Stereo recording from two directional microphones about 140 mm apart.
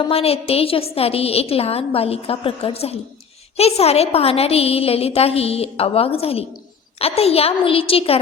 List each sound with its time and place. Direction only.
0.1 s a woman's voice: 45° left (ahead or behind)